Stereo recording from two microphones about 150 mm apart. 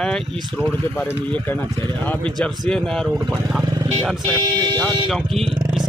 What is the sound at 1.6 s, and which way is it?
Speech, 25° right (ahead or behind).